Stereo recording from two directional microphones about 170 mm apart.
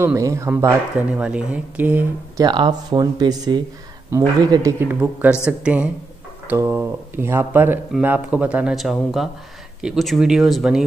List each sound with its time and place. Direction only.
0.0 s speech: 15° right (ahead or behind)
2.4 s speech: 25° right (ahead or behind); by 10.8 s centre (ahead or behind)